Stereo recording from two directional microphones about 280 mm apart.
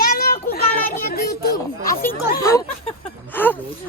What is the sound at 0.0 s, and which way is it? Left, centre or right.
Child singing, left.